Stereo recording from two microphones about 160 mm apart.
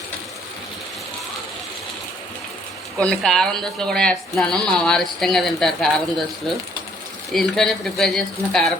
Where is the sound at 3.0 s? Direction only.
5° left (ahead or behind).